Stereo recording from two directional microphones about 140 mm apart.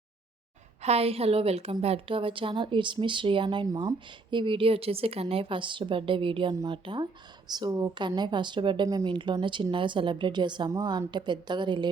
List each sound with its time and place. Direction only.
0.8 s a woman's voice: 45° right (ahead or behind)